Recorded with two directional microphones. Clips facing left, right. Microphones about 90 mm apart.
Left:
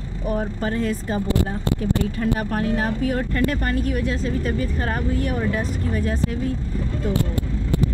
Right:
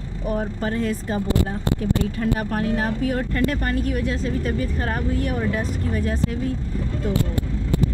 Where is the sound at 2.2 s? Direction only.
20° left (ahead or behind).